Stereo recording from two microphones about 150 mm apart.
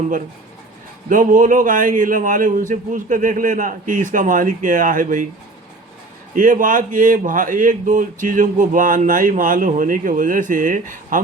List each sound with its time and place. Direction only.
1.1 s speech: 60° right (ahead or behind)
6.3 s speech: 60° right (ahead or behind)